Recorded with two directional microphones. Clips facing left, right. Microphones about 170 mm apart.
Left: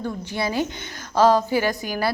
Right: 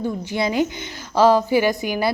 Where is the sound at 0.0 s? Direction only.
15° right (ahead or behind).